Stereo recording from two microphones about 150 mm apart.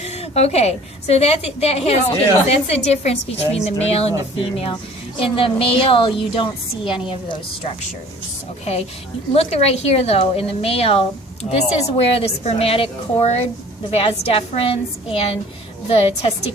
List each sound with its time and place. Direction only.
0.0 s a woman's voice: 45° left (ahead or behind)
9.3 s a woman's voice: 40° left (ahead or behind)
11.4 s speech: 30° left (ahead or behind)
11.8 s a woman's voice: 45° left (ahead or behind)